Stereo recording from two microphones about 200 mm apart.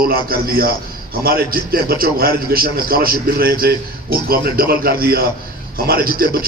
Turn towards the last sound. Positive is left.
turn(degrees=-45)  # may be behind; listen again after turning